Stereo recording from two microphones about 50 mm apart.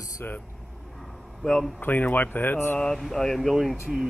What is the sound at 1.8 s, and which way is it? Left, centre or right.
Speech, left.